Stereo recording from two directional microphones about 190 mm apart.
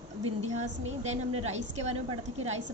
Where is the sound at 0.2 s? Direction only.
35° right (ahead or behind).